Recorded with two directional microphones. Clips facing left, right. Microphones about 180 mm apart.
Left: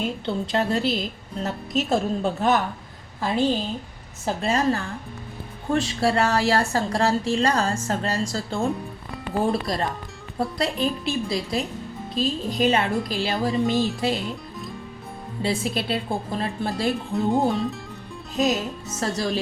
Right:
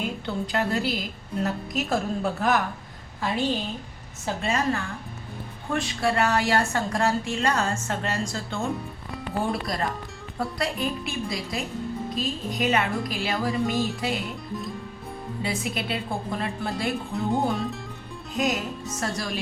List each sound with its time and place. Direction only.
0.3 s a woman's voice: 30° left (ahead or behind)
4.4 s a woman's voice: 30° left (ahead or behind)
15.4 s speech: 30° left (ahead or behind)
17.1 s speech: centre (ahead or behind)
18.3 s a woman's voice: 25° left (ahead or behind)